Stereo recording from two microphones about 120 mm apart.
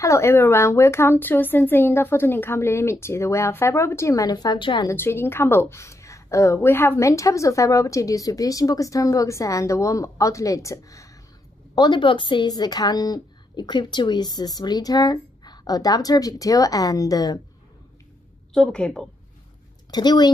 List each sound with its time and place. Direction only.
0.0 s a woman's voice: 25° left (ahead or behind); by 4.8 s 40° left (ahead or behind)
4.8 s a woman's voice: 20° left (ahead or behind)
11.7 s a woman's voice: 40° left (ahead or behind)
18.5 s a woman's voice: 5° left (ahead or behind)
19.9 s a woman's voice: 35° left (ahead or behind)